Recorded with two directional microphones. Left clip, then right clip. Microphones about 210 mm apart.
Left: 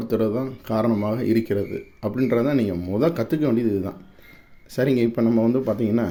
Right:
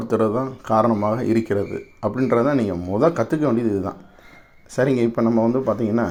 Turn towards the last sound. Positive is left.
turn(degrees=25)  # may be behind; listen again after turning